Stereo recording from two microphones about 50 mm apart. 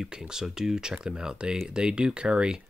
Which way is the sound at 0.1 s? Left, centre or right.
Centre.